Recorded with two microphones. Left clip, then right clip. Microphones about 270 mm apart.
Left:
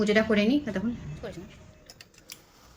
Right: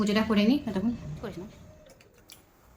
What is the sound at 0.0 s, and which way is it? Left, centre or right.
Speech, centre.